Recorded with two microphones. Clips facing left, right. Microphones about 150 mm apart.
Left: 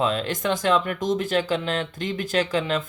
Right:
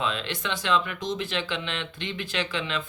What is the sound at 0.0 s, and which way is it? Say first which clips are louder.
Speech: left 6 dB; 40° left (ahead or behind).